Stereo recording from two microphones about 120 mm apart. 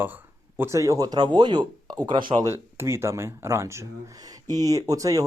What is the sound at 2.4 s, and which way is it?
Speech, 25° right (ahead or behind).